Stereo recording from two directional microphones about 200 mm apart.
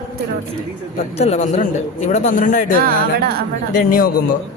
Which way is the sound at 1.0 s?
30° left (ahead or behind).